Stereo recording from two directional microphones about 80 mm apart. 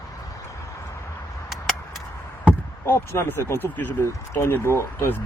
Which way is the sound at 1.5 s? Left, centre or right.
Centre.